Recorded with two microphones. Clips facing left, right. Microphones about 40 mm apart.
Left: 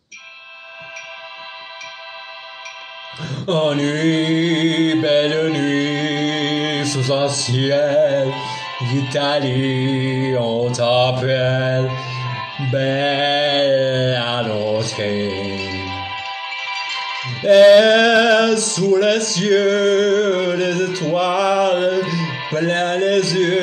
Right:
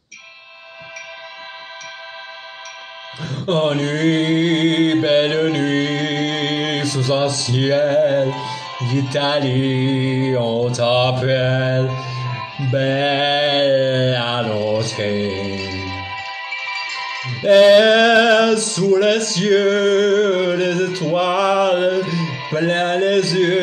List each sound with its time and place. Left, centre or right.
3.4 s music: centre
5.0 s mantra: centre
9.1 s music: centre
12.4 s music: left
12.7 s music: centre
15.6 s music: left
17.4 s music: centre
22.5 s speech: centre